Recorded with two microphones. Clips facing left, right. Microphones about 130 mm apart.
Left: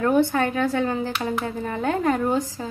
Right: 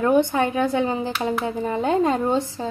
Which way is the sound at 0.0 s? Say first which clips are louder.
Right 1 dB; 15° right (ahead or behind).